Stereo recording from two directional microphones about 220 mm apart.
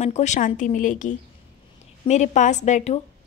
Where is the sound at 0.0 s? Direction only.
30° left (ahead or behind).